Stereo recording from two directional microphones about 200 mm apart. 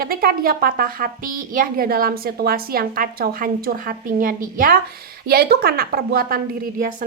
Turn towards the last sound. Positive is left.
turn(degrees=-45)  # may be behind; listen again after turning